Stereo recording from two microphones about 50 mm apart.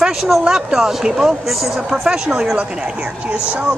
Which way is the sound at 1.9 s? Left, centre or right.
Centre.